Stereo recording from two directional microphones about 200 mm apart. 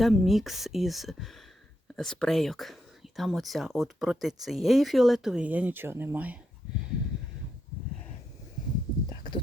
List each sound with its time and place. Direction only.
0.0 s speech: centre (ahead or behind)
9.0 s horse: 20° left (ahead or behind)